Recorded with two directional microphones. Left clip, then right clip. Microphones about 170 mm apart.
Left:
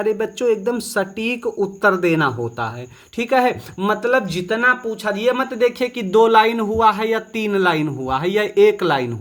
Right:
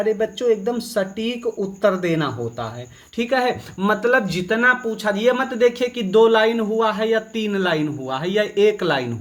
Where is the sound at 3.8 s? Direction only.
20° left (ahead or behind).